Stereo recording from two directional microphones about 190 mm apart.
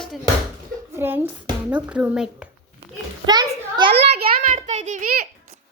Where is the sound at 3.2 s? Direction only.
20° right (ahead or behind).